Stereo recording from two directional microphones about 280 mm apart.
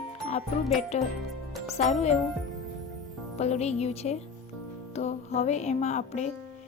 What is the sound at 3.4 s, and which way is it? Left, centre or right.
A woman's voice, left.